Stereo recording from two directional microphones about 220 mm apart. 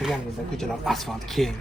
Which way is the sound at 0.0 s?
Centre (ahead or behind).